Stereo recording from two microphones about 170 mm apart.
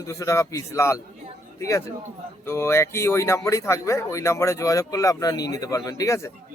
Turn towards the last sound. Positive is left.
turn(degrees=20)  # may be behind; listen again after turning